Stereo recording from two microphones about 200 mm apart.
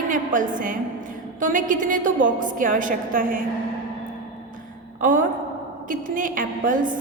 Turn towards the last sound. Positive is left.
turn(degrees=-40)  # may be behind; listen again after turning